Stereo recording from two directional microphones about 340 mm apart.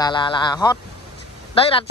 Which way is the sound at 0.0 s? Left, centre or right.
Centre.